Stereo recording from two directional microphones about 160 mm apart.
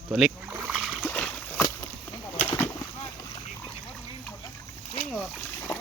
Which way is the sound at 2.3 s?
40° left (ahead or behind).